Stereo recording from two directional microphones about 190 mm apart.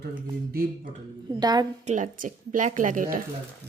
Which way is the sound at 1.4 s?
20° right (ahead or behind).